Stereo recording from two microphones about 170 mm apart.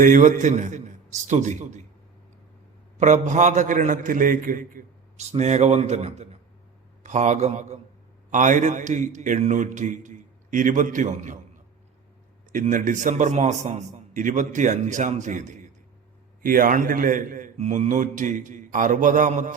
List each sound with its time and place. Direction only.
0.0 s a man's voice: 50° right (ahead or behind)
3.0 s a man's voice: 45° right (ahead or behind)
12.5 s a man's voice: 50° right (ahead or behind)